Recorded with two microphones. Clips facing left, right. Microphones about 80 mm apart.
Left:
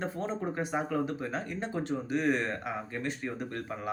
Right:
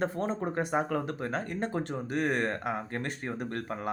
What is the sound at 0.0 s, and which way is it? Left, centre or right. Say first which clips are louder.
Speech: right 3 dB; right.